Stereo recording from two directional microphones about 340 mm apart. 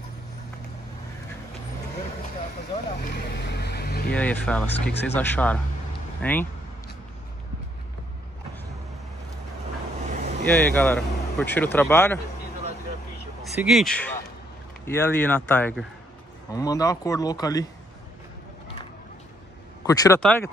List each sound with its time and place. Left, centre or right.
2.7 s boat: left
4.1 s speech: centre
10.5 s speech: centre
13.4 s speech: centre
19.8 s speech: centre